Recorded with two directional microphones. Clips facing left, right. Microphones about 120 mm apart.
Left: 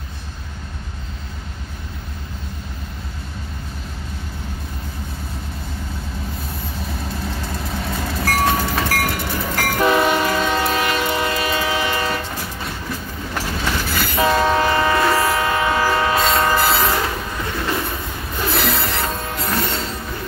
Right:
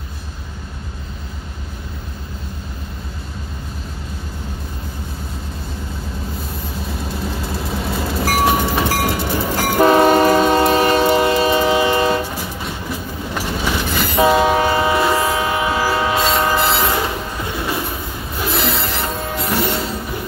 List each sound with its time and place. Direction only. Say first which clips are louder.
6.9 s train: right 3 dB; centre (ahead or behind)
8.5 s train: right 3 dB; 25° right (ahead or behind)
9.8 s train: right 6 dB; 35° right (ahead or behind); by 12.2 s 20° right (ahead or behind)
12.2 s train: right 4 dB; 10° right (ahead or behind)
15.1 s train: even; 5° right (ahead or behind)
15.4 s train: even; 15° right (ahead or behind)
16.9 s train: right 1 dB; 15° right (ahead or behind)
19.6 s music: right 4 dB; 10° right (ahead or behind)